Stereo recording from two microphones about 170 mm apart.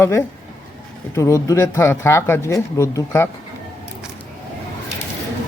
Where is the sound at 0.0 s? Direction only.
15° left (ahead or behind).